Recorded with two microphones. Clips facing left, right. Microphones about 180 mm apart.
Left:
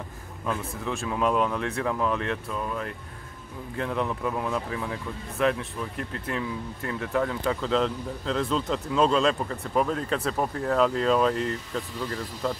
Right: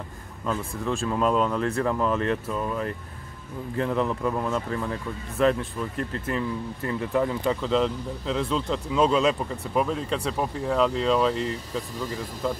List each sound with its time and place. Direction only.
0.5 s speech: centre (ahead or behind)